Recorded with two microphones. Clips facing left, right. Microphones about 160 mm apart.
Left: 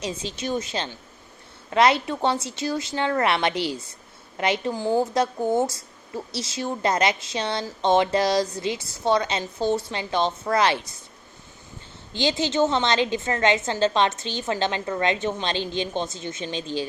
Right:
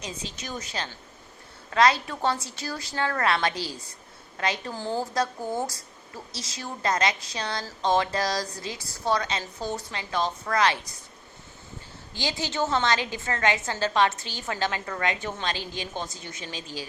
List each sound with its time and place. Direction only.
0.0 s a woman's voice: 30° left (ahead or behind)
12.1 s a woman's voice: 20° left (ahead or behind)